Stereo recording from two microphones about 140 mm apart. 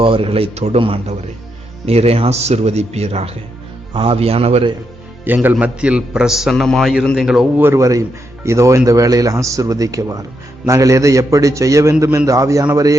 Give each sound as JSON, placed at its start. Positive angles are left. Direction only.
{"t": 0.0, "sound": "a man's voice", "side_deg": -40}
{"t": 5.2, "sound": "a man's voice", "side_deg": -15}
{"t": 7.6, "sound": "a man's voice", "side_deg": -20}